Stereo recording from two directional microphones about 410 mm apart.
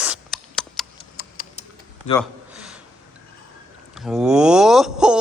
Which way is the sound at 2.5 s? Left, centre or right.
Centre.